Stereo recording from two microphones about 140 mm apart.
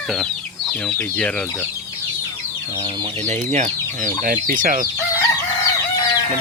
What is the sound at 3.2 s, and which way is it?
Speech, 60° right (ahead or behind).